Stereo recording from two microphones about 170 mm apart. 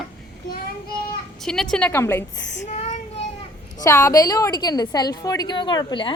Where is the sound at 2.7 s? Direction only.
45° left (ahead or behind).